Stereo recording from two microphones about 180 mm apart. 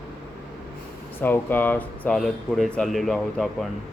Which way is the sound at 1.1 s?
10° left (ahead or behind).